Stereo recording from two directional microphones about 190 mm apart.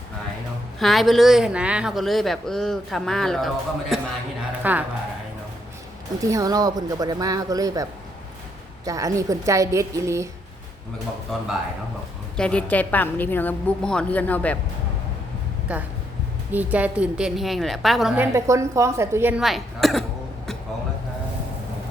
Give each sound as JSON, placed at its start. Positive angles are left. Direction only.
{"t": 0.8, "sound": "a woman's voice", "side_deg": 0}
{"t": 6.2, "sound": "a woman's voice", "side_deg": -15}
{"t": 12.4, "sound": "a woman's voice", "side_deg": 5}
{"t": 15.7, "sound": "a woman's voice", "side_deg": -5}
{"t": 18.2, "sound": "a woman's voice", "side_deg": -15}